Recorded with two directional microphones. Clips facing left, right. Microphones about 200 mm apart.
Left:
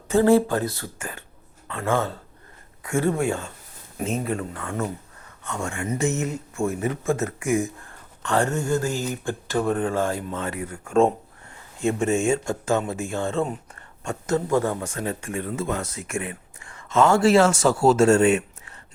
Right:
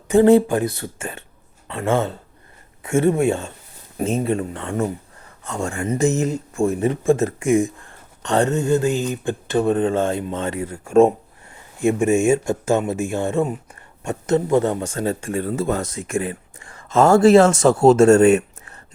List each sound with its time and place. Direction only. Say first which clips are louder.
0.1 s speech: right 5 dB; 20° right (ahead or behind)
3.9 s speech: right 5 dB; 35° right (ahead or behind)